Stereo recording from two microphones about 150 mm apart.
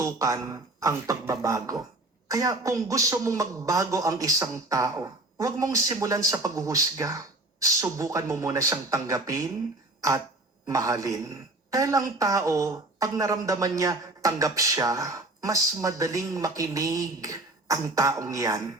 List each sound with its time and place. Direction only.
0.0 s a man's voice: 20° right (ahead or behind)
10.7 s a man's voice: 20° right (ahead or behind)